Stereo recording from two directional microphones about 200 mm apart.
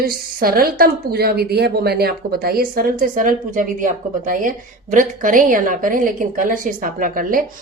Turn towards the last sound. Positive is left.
turn(degrees=-45)  # may be behind; listen again after turning